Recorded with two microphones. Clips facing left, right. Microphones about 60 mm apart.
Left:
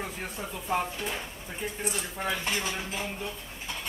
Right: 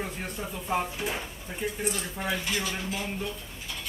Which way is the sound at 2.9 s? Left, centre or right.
Centre.